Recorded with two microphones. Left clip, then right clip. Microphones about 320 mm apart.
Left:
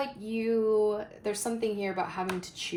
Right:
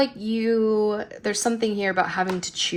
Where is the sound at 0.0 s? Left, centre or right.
Right.